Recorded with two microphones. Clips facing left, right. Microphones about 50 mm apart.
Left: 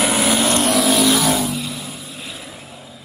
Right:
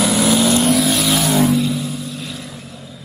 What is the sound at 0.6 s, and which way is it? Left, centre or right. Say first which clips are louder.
Vehicle: even; centre.